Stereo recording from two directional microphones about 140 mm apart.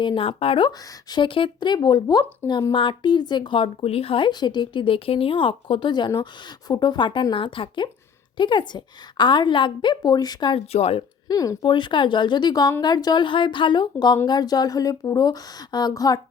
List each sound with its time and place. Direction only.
0.0 s speech: 35° left (ahead or behind)
10.7 s speech: 50° left (ahead or behind)
11.3 s speech: 25° left (ahead or behind)